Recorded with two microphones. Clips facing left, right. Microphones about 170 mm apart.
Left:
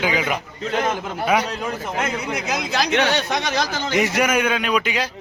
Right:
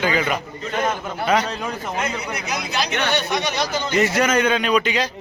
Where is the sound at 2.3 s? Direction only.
90° left.